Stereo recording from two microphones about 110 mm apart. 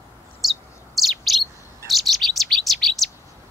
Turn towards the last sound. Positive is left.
turn(degrees=0)  # may be behind; listen again after turning